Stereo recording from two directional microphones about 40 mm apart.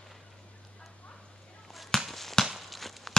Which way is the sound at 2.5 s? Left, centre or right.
Centre.